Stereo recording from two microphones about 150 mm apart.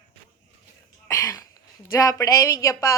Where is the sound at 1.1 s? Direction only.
20° left (ahead or behind).